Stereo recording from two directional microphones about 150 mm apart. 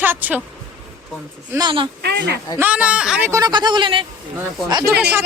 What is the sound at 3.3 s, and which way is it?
Speech, 25° right (ahead or behind).